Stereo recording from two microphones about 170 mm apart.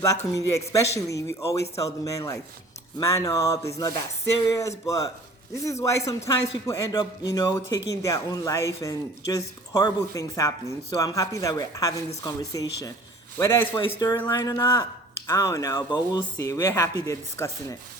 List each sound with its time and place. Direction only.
0.3 s speech: 20° left (ahead or behind)